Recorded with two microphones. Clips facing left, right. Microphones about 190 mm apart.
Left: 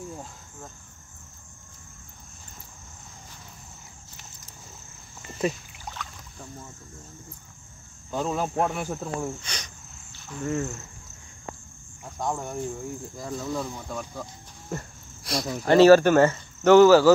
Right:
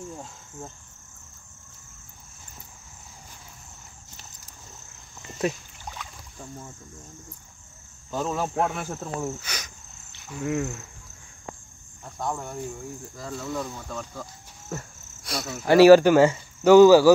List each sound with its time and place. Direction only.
5.4 s rowboat: 5° right (ahead or behind)
8.2 s speech: 5° left (ahead or behind)
12.0 s speech: 10° left (ahead or behind)
14.7 s cricket: centre (ahead or behind)
15.6 s speech: 10° right (ahead or behind)